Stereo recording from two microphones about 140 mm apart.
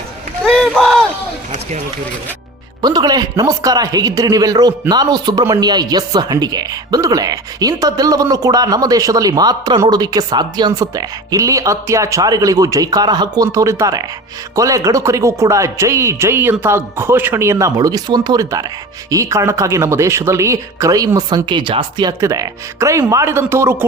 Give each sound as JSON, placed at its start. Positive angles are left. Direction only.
{"t": 0.4, "sound": "run", "side_deg": 0}
{"t": 2.8, "sound": "speech", "side_deg": -30}
{"t": 22.2, "sound": "speech", "side_deg": -20}